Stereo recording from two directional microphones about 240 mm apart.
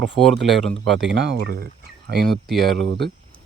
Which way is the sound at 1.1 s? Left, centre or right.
Right.